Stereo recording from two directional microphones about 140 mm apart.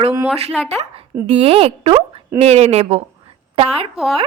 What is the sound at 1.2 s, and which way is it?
A woman's voice, 45° right (ahead or behind).